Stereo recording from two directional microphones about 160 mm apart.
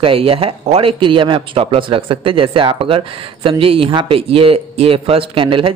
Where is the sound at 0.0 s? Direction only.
35° right (ahead or behind).